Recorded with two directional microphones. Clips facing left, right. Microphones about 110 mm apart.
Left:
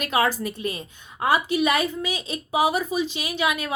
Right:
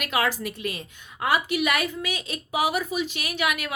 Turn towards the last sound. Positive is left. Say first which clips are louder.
# left 2 dB
turn(degrees=25)  # may be behind; listen again after turning